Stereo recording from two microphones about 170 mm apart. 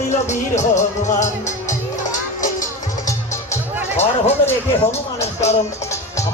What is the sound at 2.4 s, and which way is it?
Music, 50° left (ahead or behind).